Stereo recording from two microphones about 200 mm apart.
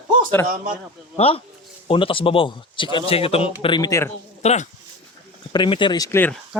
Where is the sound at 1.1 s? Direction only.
30° left (ahead or behind).